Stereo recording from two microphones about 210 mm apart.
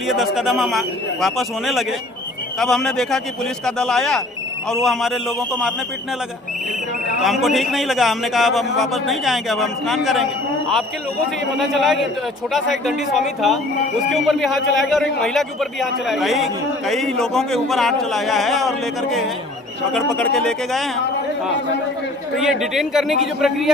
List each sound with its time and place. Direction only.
0.1 s speech: centre (ahead or behind)
7.2 s speech: centre (ahead or behind)
11.6 s speech: centre (ahead or behind)
19.9 s speech: centre (ahead or behind)
22.4 s speech: centre (ahead or behind)